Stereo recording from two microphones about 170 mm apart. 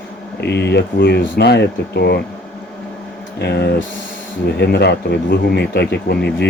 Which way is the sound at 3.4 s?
75° left (ahead or behind).